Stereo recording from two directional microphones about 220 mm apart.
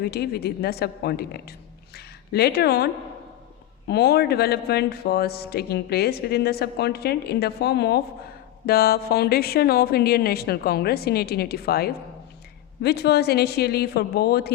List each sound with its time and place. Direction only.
0.0 s a man's voice: 45° left (ahead or behind)